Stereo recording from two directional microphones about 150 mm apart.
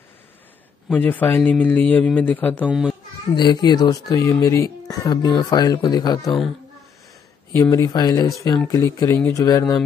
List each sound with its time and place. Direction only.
0.9 s speech: 10° left (ahead or behind)
2.6 s a child's voice: 5° right (ahead or behind)
3.3 s speech: 30° left (ahead or behind)
7.7 s speech: 25° left (ahead or behind)